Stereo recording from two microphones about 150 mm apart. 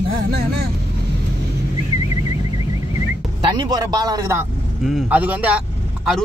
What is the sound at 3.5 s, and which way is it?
Speech, 25° right (ahead or behind).